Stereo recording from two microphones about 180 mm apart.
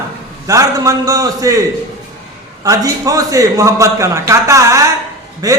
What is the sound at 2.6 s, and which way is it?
A man's voice, 20° right (ahead or behind).